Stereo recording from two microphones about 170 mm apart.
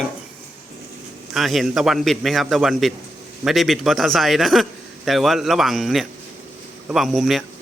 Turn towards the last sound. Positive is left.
turn(degrees=0)  # may be behind; listen again after turning